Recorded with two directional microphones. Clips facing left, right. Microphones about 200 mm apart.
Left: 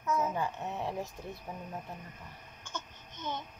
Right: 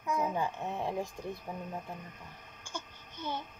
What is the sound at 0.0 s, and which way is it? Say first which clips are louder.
Speech: even; 15° right (ahead or behind).